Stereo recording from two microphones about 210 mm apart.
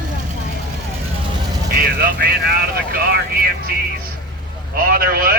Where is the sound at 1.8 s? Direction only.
45° right (ahead or behind).